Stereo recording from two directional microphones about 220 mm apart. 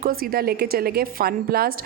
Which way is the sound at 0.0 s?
40° right (ahead or behind).